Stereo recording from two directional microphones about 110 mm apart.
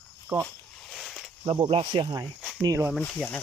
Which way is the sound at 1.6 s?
60° right (ahead or behind).